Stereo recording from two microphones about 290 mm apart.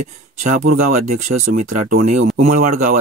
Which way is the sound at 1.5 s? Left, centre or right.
Right.